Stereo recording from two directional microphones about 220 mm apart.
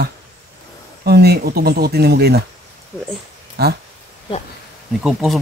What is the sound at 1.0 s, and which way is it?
Speech, 45° right (ahead or behind).